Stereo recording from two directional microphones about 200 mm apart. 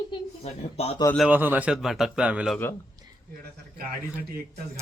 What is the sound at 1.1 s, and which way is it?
Speech, 5° right (ahead or behind).